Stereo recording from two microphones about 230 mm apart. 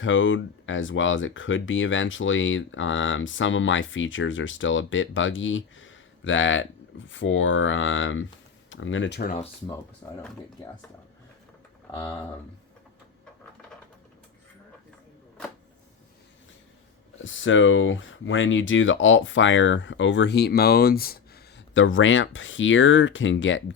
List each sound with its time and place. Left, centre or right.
0.0 s speech: left
10.0 s speech: centre
17.2 s speech: left